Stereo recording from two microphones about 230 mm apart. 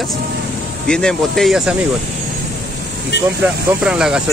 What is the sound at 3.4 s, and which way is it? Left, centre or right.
Speech, centre.